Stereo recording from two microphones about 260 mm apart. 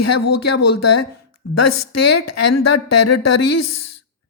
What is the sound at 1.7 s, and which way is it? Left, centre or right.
Speech, left.